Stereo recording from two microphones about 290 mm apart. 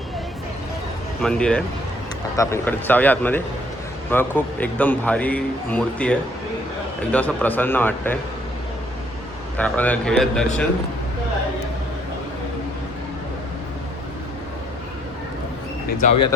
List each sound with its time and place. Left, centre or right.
1.2 s a man's voice: centre
9.6 s speech: centre
15.9 s speech: left